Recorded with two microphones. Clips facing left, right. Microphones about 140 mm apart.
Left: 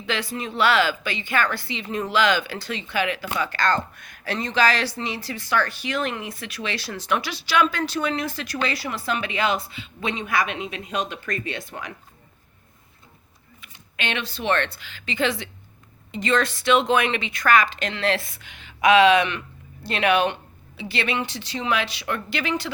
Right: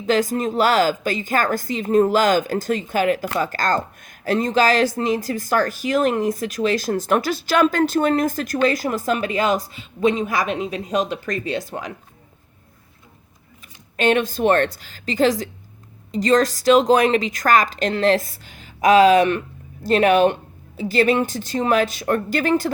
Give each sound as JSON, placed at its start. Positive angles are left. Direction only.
{"t": 0.0, "sound": "speech", "side_deg": -40}
{"t": 13.6, "sound": "speech", "side_deg": -40}